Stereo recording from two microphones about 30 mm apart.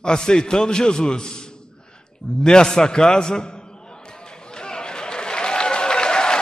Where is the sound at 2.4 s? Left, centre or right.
Left.